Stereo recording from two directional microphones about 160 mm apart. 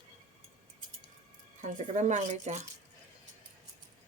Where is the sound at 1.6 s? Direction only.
50° right (ahead or behind).